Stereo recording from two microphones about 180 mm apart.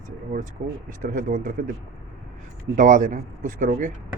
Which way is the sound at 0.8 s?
50° right (ahead or behind).